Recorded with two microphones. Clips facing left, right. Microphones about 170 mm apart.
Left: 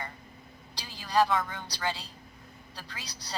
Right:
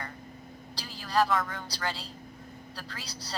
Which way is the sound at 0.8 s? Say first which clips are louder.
Left 1 dB; 15° left (ahead or behind).